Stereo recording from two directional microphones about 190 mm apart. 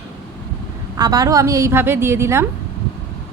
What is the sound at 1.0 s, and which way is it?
A woman's voice, 20° right (ahead or behind).